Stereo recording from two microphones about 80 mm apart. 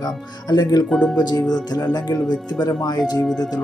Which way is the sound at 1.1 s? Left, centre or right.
Left.